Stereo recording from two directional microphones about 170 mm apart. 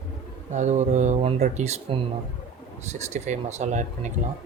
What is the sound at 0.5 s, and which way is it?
Speech, 45° right (ahead or behind).